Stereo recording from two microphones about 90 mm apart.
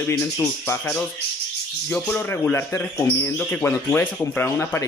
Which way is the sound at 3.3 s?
20° left (ahead or behind).